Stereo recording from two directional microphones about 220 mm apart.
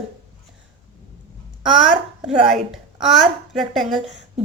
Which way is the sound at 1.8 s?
5° right (ahead or behind).